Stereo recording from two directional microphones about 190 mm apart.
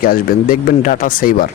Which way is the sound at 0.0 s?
50° left (ahead or behind).